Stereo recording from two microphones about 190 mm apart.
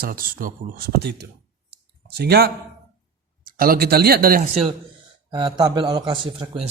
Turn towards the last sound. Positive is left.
turn(degrees=-25)  # may be behind; listen again after turning